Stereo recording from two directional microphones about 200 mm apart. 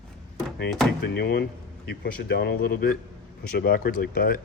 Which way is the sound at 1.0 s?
50° left (ahead or behind).